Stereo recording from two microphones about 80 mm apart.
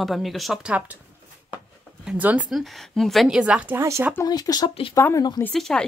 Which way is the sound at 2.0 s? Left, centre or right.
Centre.